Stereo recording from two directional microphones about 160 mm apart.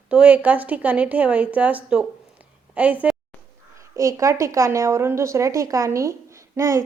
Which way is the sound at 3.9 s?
20° right (ahead or behind).